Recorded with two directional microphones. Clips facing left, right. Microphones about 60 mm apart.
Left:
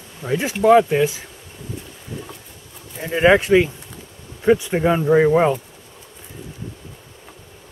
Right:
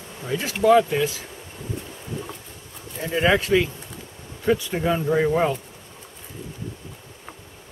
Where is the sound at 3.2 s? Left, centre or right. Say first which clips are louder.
Left 6 dB; left.